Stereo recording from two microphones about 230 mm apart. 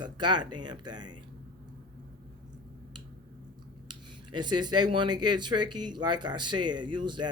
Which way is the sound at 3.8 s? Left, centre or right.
Centre.